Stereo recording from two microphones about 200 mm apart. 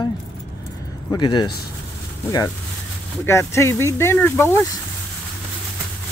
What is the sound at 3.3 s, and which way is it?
Speech, 15° left (ahead or behind).